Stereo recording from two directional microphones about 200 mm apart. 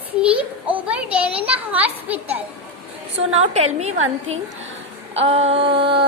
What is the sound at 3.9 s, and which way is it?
Speech, 90° right.